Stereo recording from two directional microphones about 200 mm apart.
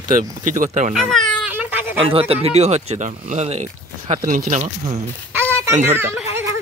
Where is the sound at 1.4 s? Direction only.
10° right (ahead or behind).